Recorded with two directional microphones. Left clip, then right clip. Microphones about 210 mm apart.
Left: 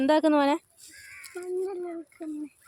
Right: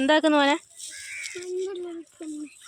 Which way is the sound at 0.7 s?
50° left (ahead or behind).